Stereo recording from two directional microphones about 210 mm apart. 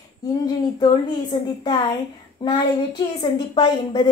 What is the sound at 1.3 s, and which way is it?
A woman's voice, 20° left (ahead or behind).